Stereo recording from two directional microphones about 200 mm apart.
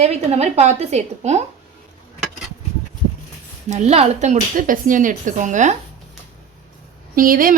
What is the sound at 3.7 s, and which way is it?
Speech, 35° right (ahead or behind).